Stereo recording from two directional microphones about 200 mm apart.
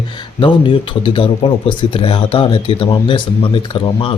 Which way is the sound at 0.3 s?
25° left (ahead or behind).